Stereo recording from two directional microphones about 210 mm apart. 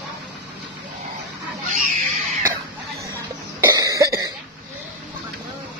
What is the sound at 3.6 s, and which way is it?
Cough, 15° right (ahead or behind).